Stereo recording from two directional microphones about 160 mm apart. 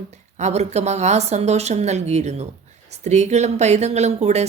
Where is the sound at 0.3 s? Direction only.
45° right (ahead or behind).